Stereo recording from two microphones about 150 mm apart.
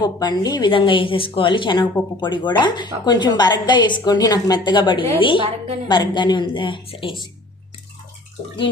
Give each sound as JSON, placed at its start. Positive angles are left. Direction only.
{"t": 0.0, "sound": "a woman's voice", "side_deg": 25}
{"t": 5.4, "sound": "a woman's voice", "side_deg": -40}
{"t": 5.9, "sound": "a woman's voice", "side_deg": 30}